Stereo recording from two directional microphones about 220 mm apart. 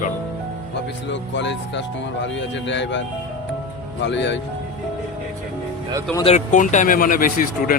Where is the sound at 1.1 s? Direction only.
55° left (ahead or behind).